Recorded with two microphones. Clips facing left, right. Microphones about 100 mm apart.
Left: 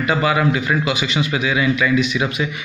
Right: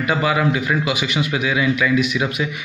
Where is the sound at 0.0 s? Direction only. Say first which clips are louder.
Left 1 dB; 5° right (ahead or behind).